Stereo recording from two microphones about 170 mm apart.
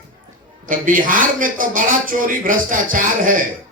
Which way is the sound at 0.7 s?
55° right (ahead or behind).